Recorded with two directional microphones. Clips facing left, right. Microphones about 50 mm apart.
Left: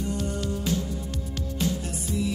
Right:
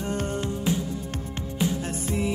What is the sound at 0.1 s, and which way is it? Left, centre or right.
Music, right.